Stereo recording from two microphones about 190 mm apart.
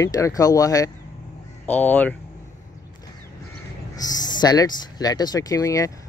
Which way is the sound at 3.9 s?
20° left (ahead or behind).